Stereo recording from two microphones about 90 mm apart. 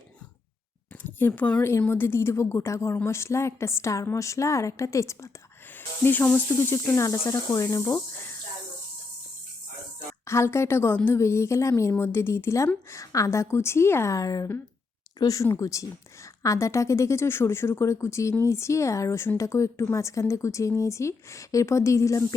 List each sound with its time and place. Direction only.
1.0 s speech: 20° left (ahead or behind)
1.9 s a woman's voice: 25° left (ahead or behind)
6.1 s speech: 20° left (ahead or behind)
6.6 s a woman's voice: 30° left (ahead or behind)
10.2 s a woman's voice: 30° left (ahead or behind)